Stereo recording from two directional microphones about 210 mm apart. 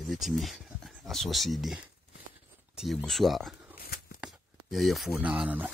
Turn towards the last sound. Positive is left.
turn(degrees=-5)  # may be behind; listen again after turning